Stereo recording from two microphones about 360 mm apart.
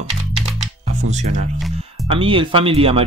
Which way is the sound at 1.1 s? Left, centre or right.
Centre.